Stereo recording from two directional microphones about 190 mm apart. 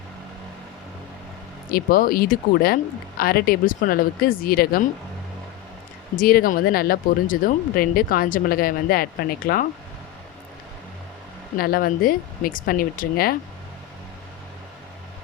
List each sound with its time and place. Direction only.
1.7 s speech: 50° left (ahead or behind)
6.1 s speech: 50° left (ahead or behind)
11.5 s speech: 50° left (ahead or behind)